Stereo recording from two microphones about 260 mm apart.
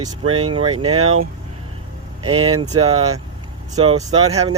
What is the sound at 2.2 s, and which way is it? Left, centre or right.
Speech, right.